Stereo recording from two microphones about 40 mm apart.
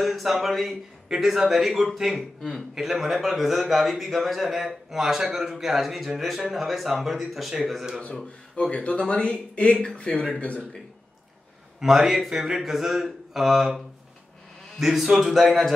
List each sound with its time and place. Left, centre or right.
0.0 s a man's voice: centre
8.1 s speech: left
11.8 s a man's voice: centre